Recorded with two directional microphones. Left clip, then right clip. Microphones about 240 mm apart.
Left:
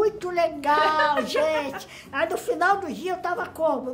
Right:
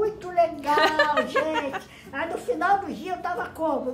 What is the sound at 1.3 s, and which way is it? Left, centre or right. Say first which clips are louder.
Speech: left 2 dB; right.